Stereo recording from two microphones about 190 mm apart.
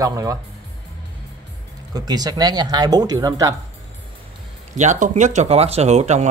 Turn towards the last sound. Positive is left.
turn(degrees=-35)  # may be behind; listen again after turning